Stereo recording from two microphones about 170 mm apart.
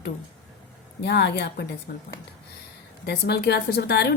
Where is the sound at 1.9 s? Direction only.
65° left (ahead or behind).